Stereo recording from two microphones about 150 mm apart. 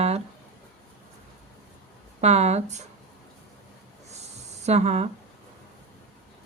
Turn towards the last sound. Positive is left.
turn(degrees=-45)  # may be behind; listen again after turning